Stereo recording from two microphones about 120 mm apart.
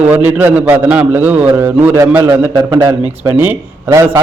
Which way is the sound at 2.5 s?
40° right (ahead or behind).